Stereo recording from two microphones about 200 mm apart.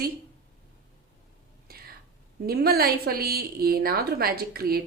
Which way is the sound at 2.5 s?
50° right (ahead or behind).